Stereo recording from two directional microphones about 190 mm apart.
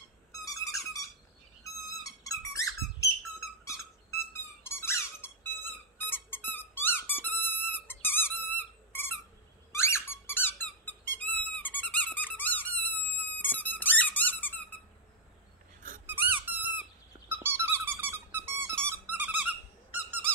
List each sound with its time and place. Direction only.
0.5 s dog: 15° left (ahead or behind)
1.6 s squeak: 15° left (ahead or behind)
16.1 s squeak: 10° right (ahead or behind)